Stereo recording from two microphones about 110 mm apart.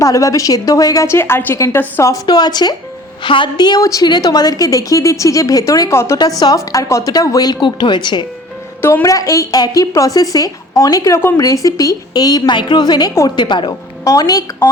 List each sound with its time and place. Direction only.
0.0 s a woman's voice: 30° left (ahead or behind)
1.5 s a woman's voice: 30° left (ahead or behind)
2.2 s a woman's voice: 40° left (ahead or behind)
8.8 s a woman's voice: 20° left (ahead or behind)
11.2 s a woman's voice: 20° left (ahead or behind)
11.4 s a woman's voice: 30° left (ahead or behind)
14.0 s a woman's voice: 30° left (ahead or behind)